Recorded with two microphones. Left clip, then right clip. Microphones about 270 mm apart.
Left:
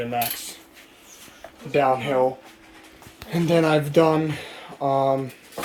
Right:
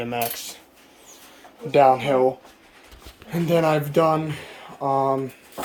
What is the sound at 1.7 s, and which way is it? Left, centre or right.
Speech, centre.